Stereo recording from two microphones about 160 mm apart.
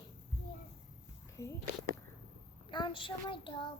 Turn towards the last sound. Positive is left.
turn(degrees=30)  # may be behind; listen again after turning